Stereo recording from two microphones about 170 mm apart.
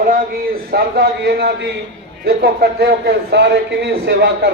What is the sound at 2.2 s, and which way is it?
A man's voice, 65° right (ahead or behind).